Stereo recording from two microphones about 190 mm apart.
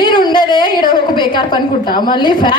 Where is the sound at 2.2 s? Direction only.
25° left (ahead or behind).